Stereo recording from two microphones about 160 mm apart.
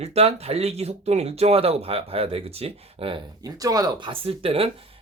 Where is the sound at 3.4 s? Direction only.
20° right (ahead or behind).